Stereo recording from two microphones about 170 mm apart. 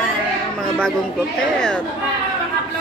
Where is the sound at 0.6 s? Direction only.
5° left (ahead or behind).